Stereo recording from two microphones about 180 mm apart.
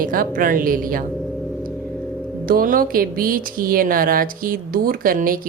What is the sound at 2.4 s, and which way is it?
Speech, 50° right (ahead or behind).